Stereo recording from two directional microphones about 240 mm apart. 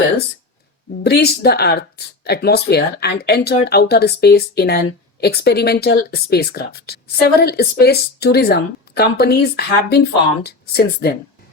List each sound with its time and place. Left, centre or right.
1.0 s speech: left